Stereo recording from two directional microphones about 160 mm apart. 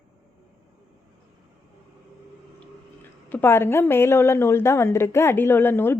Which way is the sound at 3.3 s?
15° left (ahead or behind).